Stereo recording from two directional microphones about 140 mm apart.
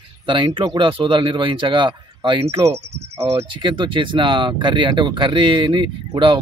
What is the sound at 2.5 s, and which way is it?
Speech, 20° right (ahead or behind).